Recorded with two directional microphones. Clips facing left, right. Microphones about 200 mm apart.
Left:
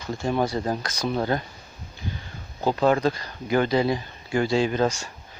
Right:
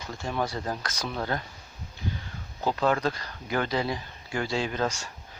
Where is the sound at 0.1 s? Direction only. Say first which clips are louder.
Left 7 dB; 20° left (ahead or behind).